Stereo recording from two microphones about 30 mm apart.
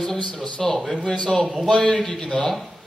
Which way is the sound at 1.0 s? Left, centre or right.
Left.